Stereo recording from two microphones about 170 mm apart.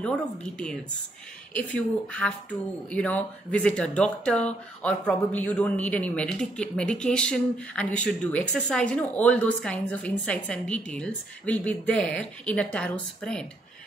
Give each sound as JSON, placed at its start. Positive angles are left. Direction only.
{"t": 0.0, "sound": "a woman's voice", "side_deg": 5}